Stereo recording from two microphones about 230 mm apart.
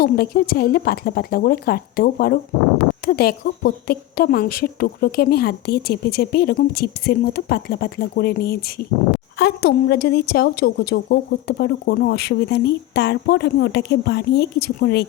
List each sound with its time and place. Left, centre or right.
0.0 s a woman's voice: left